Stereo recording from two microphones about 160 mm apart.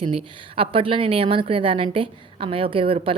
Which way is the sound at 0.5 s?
35° right (ahead or behind).